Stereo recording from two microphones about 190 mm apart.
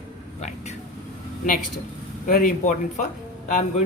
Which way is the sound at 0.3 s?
35° left (ahead or behind).